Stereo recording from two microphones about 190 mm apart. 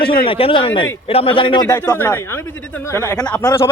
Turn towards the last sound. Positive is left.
turn(degrees=15)  # may be behind; listen again after turning